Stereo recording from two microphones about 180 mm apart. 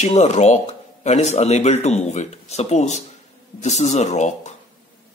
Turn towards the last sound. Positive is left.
turn(degrees=40)  # may be behind; listen again after turning